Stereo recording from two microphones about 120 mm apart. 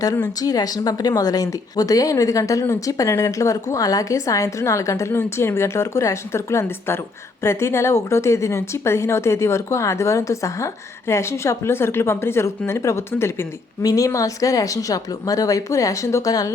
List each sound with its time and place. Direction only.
0.0 s speech: 30° left (ahead or behind)